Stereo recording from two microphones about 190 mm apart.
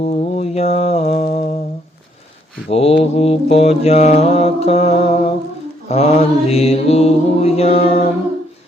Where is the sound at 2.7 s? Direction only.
30° left (ahead or behind).